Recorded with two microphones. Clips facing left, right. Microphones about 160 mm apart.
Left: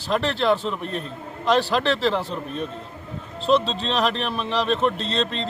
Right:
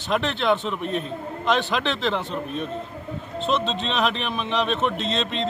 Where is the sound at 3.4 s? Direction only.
35° left (ahead or behind).